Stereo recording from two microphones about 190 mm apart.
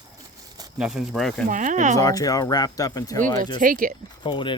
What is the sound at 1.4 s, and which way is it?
Speech, 40° right (ahead or behind).